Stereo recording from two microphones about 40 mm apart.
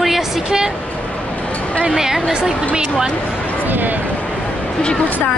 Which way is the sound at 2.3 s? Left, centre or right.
Right.